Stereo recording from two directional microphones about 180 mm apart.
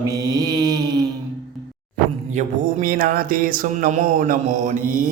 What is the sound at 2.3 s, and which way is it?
Music, 40° right (ahead or behind).